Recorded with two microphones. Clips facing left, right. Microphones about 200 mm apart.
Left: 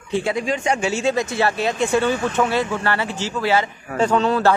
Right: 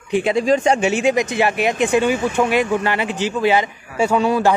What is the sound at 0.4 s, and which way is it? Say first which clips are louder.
Speech: right 6 dB; 30° right (ahead or behind).